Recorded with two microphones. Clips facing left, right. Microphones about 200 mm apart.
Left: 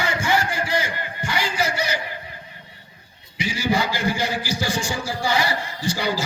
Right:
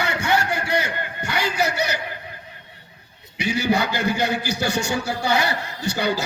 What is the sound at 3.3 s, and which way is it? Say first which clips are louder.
A man's voice: right 2 dB; 65° right (ahead or behind).